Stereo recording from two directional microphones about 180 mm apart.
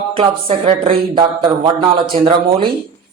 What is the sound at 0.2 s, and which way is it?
Speech, 30° right (ahead or behind).